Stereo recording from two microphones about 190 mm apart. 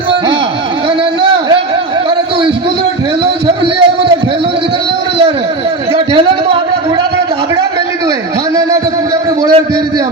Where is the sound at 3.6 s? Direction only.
30° right (ahead or behind).